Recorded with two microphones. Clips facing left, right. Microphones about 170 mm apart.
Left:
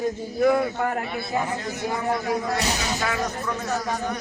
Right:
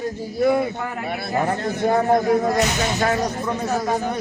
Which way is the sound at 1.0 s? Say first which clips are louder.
Right 4 dB; 60° right (ahead or behind).